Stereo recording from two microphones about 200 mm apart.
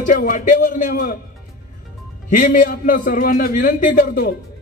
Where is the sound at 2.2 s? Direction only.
40° left (ahead or behind).